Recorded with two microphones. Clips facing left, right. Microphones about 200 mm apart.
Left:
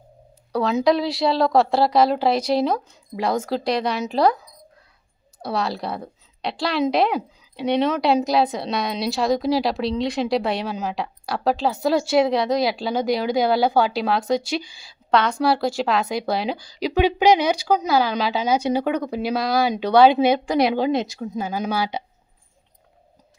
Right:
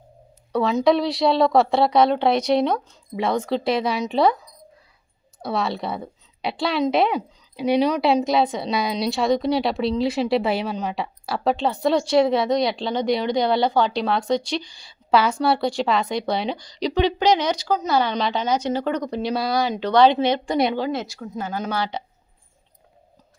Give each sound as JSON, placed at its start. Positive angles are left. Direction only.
{"t": 0.5, "sound": "a woman's voice", "side_deg": 0}
{"t": 5.4, "sound": "a woman's voice", "side_deg": 0}
{"t": 20.7, "sound": "speech", "side_deg": 15}